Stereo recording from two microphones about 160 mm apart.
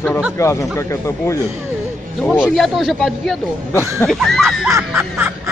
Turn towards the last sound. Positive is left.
turn(degrees=-15)  # may be behind; listen again after turning